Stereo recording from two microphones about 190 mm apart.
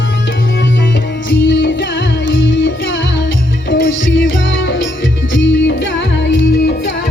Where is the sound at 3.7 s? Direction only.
75° left (ahead or behind).